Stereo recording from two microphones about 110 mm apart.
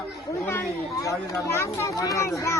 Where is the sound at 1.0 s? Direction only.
30° left (ahead or behind).